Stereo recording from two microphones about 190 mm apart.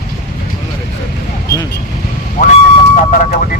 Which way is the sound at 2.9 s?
40° left (ahead or behind).